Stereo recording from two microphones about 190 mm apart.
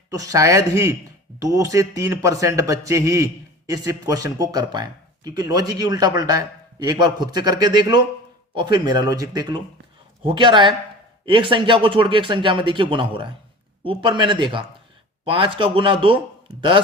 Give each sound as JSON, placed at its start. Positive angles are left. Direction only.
{"t": 0.1, "sound": "a man's voice", "side_deg": -15}